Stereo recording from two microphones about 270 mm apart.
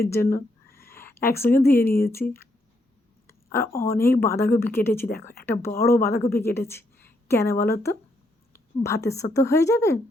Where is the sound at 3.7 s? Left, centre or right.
Centre.